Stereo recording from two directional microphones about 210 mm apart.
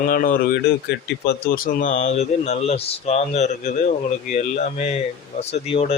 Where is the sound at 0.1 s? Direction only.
40° left (ahead or behind).